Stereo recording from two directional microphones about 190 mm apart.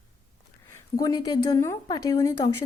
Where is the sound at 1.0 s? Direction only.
20° left (ahead or behind).